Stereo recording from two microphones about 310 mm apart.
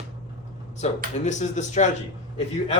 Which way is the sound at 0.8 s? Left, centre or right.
Left.